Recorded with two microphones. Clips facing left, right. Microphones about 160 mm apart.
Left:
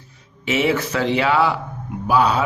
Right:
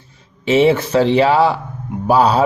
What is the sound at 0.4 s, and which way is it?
Speech, 30° right (ahead or behind).